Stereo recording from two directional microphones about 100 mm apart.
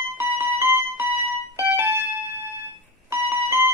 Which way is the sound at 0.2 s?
25° right (ahead or behind).